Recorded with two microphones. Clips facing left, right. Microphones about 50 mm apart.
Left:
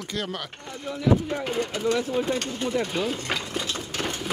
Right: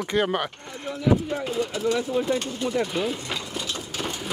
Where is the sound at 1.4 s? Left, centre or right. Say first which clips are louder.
Right 1 dB; left.